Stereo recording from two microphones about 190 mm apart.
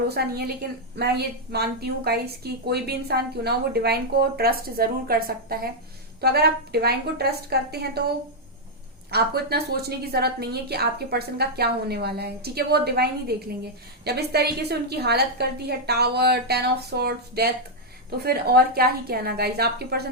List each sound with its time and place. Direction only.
0.1 s a woman's voice: 55° right (ahead or behind)
9.0 s a woman's voice: 55° right (ahead or behind)